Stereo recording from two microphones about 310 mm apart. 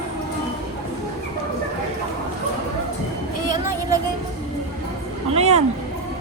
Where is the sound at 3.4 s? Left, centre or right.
Centre.